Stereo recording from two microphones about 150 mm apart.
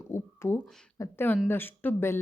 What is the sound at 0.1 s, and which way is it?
Speech, 15° left (ahead or behind).